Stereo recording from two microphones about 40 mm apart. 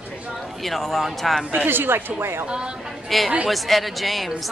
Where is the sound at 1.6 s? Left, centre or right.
Right.